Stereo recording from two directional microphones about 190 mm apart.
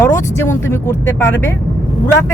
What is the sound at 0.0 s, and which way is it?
Speech, 15° left (ahead or behind).